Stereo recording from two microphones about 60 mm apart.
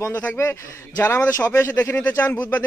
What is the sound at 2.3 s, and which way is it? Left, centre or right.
Speech, left.